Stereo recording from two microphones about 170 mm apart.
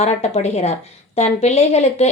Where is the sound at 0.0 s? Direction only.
40° left (ahead or behind).